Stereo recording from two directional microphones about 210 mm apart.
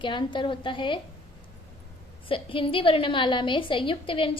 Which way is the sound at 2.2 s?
25° left (ahead or behind).